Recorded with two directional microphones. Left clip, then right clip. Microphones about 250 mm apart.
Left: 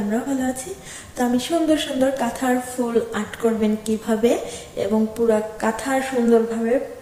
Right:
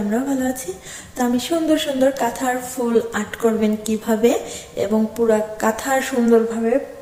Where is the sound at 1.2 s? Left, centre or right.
Centre.